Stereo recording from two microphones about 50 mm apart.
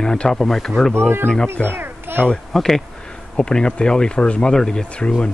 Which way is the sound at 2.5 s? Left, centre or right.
Centre.